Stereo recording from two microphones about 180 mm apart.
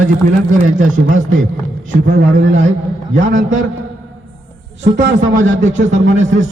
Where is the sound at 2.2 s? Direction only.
90° right.